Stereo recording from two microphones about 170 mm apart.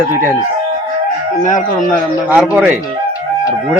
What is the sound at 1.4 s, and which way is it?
Speech, 50° left (ahead or behind).